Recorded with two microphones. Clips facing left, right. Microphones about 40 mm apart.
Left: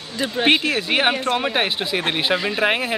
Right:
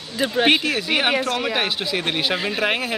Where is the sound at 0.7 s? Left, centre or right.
Left.